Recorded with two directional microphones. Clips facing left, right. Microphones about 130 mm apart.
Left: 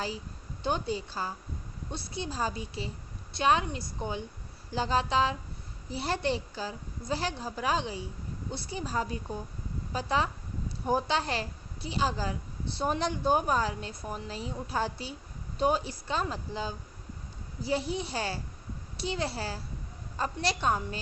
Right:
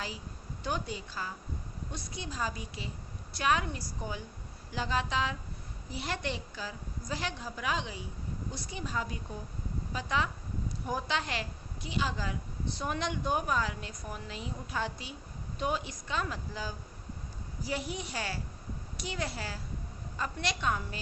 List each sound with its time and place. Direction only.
0.6 s a woman's voice: 30° left (ahead or behind)